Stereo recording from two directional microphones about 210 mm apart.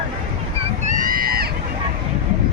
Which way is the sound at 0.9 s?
40° right (ahead or behind).